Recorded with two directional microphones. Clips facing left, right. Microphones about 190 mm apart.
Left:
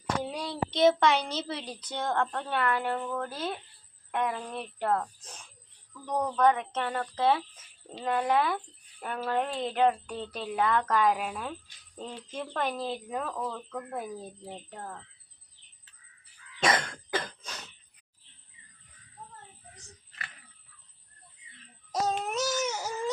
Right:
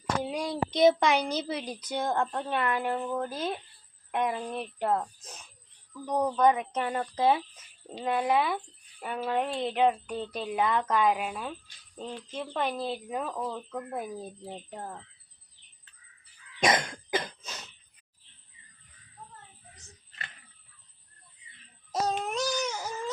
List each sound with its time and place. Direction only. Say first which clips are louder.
0.2 s speech: right 2 dB; 10° right (ahead or behind)
14.7 s speech: right 3 dB; 20° right (ahead or behind)
16.6 s cough: right 1 dB; 20° right (ahead or behind)
21.9 s a sound: even; centre (ahead or behind)